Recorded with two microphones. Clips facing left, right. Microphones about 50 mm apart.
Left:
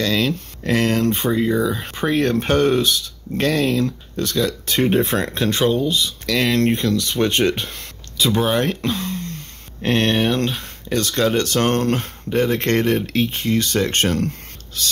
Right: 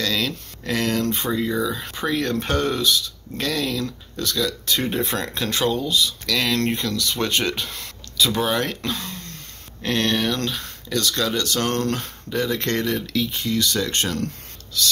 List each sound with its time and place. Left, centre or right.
0.0 s speech: centre
9.8 s speech: left